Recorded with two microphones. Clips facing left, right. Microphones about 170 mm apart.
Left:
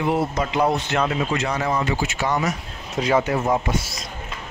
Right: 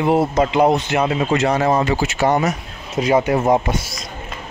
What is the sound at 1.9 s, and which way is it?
Speech, 75° right (ahead or behind).